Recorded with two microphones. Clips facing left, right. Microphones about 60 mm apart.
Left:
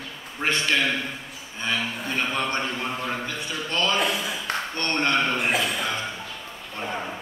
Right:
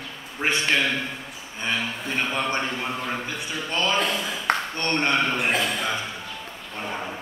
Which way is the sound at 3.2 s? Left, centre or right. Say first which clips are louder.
Even; centre.